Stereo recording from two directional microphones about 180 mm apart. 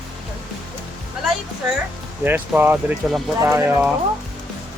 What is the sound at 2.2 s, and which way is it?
Speech, 10° right (ahead or behind).